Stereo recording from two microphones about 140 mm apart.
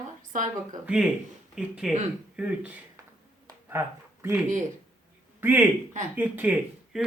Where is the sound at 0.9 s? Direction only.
5° right (ahead or behind).